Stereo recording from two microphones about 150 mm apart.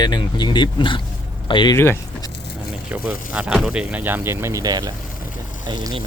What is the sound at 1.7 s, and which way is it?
Speech, 15° left (ahead or behind).